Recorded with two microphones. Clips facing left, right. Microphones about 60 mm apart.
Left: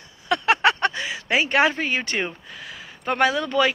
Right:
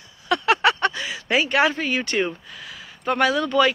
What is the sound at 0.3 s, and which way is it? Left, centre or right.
Speech, left.